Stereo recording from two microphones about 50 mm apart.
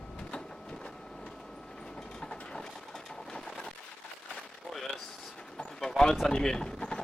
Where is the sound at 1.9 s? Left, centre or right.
Centre.